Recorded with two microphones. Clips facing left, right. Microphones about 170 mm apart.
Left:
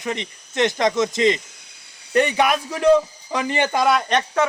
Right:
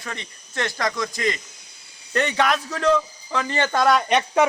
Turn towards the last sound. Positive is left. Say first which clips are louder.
# right 1 dB
turn(degrees=-10)  # may be behind; listen again after turning